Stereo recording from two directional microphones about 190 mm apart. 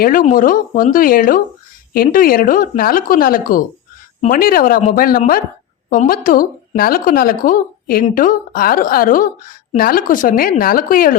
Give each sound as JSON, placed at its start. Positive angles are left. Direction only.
{"t": 0.0, "sound": "speech", "side_deg": 45}